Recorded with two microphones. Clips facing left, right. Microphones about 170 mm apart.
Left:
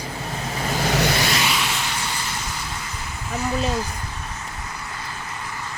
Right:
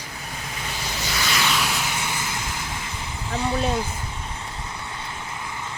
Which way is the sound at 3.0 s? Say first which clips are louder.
Right 1 dB; 25° right (ahead or behind).